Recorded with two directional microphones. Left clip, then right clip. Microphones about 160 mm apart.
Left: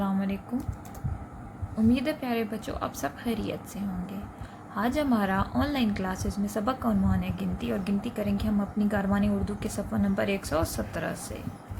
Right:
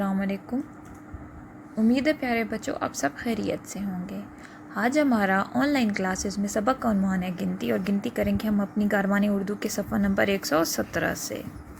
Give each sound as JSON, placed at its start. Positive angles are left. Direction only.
{"t": 0.0, "sound": "a sound", "side_deg": -35}
{"t": 1.9, "sound": "speech", "side_deg": -35}
{"t": 4.7, "sound": "speech", "side_deg": -30}